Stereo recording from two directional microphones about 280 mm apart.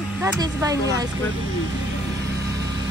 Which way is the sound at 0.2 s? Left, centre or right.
Centre.